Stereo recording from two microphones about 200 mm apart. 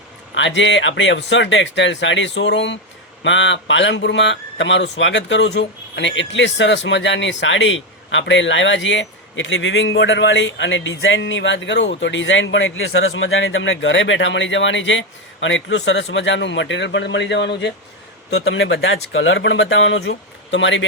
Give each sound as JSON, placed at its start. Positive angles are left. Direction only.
{"t": 0.3, "sound": "speech", "side_deg": 65}
{"t": 18.3, "sound": "speech", "side_deg": 70}